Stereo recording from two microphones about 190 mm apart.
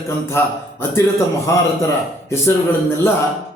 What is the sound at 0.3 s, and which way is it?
Speech, 10° left (ahead or behind).